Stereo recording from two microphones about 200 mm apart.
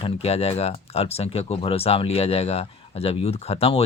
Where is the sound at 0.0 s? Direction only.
30° left (ahead or behind).